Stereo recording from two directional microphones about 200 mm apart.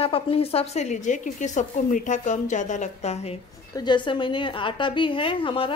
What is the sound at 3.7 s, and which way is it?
A woman's voice, 20° left (ahead or behind).